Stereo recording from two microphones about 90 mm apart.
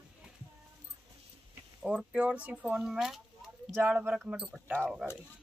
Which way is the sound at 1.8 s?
10° right (ahead or behind).